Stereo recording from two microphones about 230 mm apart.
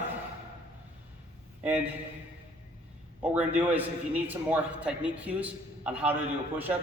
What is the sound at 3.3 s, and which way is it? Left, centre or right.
A man's voice, centre.